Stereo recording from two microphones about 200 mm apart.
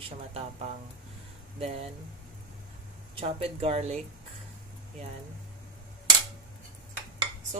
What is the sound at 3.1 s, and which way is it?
Speech, 30° right (ahead or behind).